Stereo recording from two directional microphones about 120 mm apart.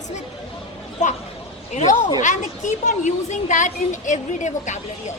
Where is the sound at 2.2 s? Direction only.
90° left.